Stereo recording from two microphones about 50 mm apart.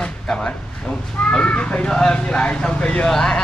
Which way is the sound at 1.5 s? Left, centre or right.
Left.